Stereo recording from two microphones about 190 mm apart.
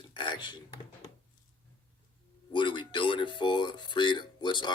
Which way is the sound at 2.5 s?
25° left (ahead or behind).